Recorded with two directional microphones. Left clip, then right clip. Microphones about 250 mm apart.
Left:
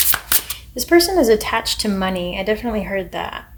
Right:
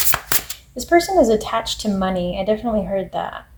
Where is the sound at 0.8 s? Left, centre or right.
Left.